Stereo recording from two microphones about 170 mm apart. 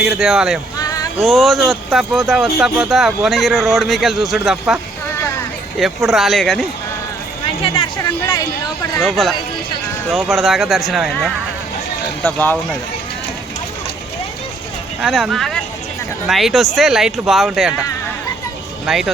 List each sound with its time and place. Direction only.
0.0 s speech: centre (ahead or behind)
0.8 s a sound: 20° left (ahead or behind)
1.2 s speech: centre (ahead or behind)
5.8 s speech: centre (ahead or behind)
9.0 s speech: centre (ahead or behind)
12.2 s speech: 10° left (ahead or behind)
15.0 s speech: centre (ahead or behind)
18.9 s speech: centre (ahead or behind)